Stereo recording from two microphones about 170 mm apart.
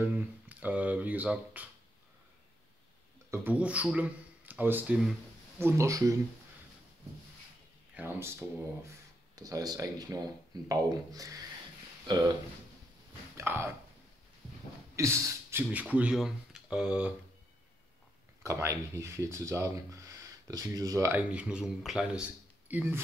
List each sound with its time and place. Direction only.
0.0 s speech: 10° right (ahead or behind)
3.3 s speech: 10° right (ahead or behind)
7.9 s speech: 15° right (ahead or behind)
13.4 s speech: 15° right (ahead or behind)
15.0 s speech: 15° right (ahead or behind)
18.4 s speech: 15° right (ahead or behind)
21.2 s speech: 5° right (ahead or behind)